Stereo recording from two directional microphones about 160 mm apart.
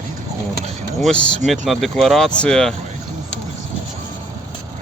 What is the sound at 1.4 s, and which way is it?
Speech, centre (ahead or behind).